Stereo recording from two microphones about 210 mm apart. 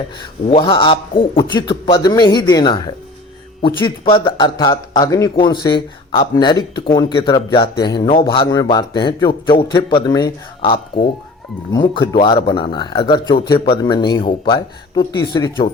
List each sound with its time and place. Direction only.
0.2 s speech: 25° left (ahead or behind)